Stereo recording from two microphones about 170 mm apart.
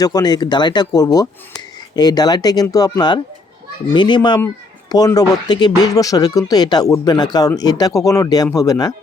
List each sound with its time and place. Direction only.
0.0 s speech: 25° left (ahead or behind)